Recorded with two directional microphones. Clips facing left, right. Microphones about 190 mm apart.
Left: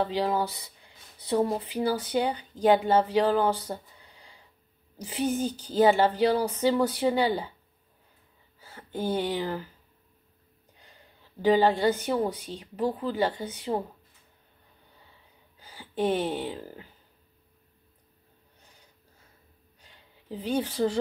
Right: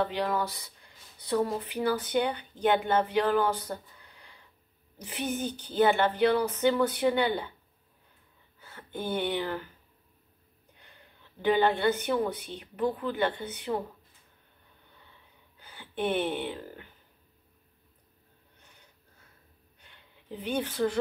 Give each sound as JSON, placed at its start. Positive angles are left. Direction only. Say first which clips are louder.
{"t": 0.0, "sound": "speech", "louder": "left 2 dB", "side_deg": 30}
{"t": 8.5, "sound": "speech", "louder": "left 4 dB", "side_deg": 35}
{"t": 11.4, "sound": "speech", "louder": "left 3 dB", "side_deg": 30}
{"t": 15.6, "sound": "speech", "louder": "left 4 dB", "side_deg": 35}
{"t": 20.4, "sound": "speech", "louder": "left 2 dB", "side_deg": 35}